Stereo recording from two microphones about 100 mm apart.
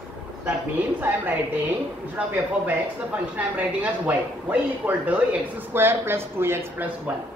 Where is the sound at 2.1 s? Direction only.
15° right (ahead or behind).